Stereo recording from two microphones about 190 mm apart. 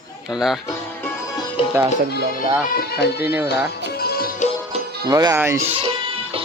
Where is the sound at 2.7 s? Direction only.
55° left (ahead or behind).